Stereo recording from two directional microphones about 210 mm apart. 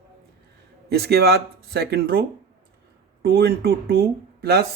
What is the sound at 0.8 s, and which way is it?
Speech, 50° right (ahead or behind).